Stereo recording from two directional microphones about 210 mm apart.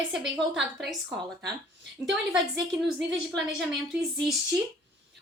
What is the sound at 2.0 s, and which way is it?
Speech, 10° right (ahead or behind).